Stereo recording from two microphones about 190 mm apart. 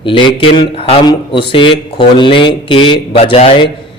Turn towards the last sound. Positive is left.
turn(degrees=30)  # may be behind; listen again after turning